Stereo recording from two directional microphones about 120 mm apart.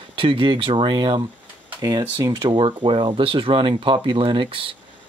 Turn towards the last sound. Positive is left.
turn(degrees=-45)  # may be behind; listen again after turning